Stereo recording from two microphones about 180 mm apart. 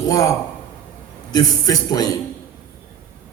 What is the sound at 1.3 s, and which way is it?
Speech, 20° left (ahead or behind).